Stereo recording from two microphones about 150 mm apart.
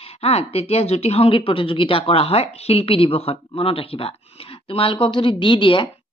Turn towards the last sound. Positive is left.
turn(degrees=35)  # may be behind; listen again after turning